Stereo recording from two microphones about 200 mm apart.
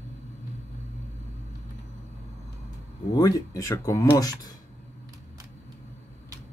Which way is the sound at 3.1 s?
15° left (ahead or behind).